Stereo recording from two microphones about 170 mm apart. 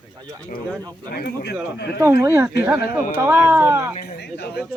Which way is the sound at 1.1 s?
70° left (ahead or behind).